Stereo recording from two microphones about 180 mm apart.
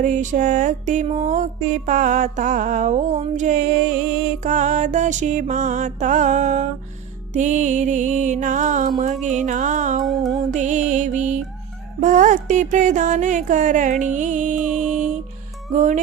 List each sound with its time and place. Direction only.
0.0 s music: 45° right (ahead or behind)
10.0 s music: centre (ahead or behind)
10.3 s music: 40° right (ahead or behind)